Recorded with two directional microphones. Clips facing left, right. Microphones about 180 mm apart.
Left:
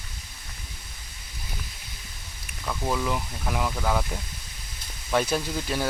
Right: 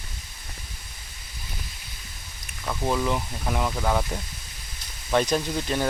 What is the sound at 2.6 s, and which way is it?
Speech, 5° right (ahead or behind).